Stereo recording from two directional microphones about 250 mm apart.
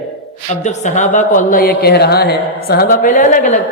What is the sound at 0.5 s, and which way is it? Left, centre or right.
A woman's voice, left.